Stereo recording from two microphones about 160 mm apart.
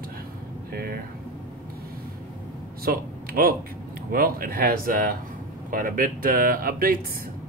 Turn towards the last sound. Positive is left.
turn(degrees=-65)  # may be behind; listen again after turning